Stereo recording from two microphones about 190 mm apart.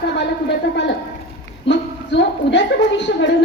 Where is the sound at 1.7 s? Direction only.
70° left (ahead or behind).